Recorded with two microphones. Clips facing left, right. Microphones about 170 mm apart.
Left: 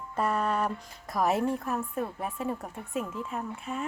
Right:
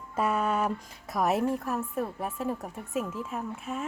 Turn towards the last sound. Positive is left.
turn(degrees=0)  # may be behind; listen again after turning